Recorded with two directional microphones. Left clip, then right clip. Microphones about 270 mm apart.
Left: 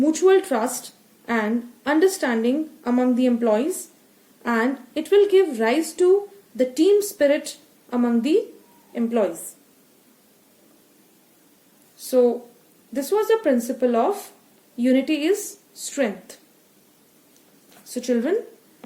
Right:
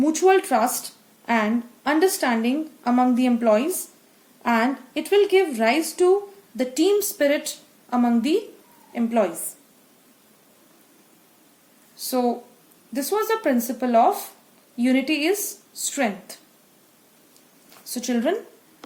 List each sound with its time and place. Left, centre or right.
0.0 s a woman's voice: centre
12.9 s a woman's voice: centre
17.8 s a woman's voice: right